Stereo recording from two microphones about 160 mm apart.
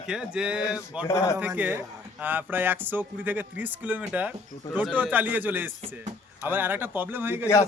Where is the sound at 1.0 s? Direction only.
20° left (ahead or behind).